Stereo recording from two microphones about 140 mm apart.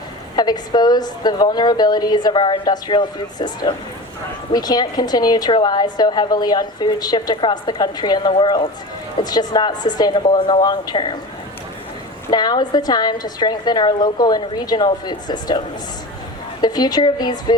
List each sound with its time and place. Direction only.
0.3 s a woman's voice: 30° left (ahead or behind)
12.3 s a woman's voice: 30° left (ahead or behind)